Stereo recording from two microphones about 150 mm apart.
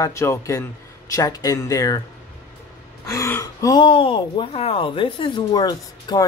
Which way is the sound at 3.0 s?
20° left (ahead or behind).